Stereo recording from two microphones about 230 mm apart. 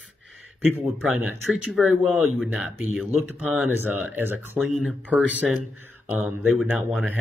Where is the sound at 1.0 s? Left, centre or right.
Centre.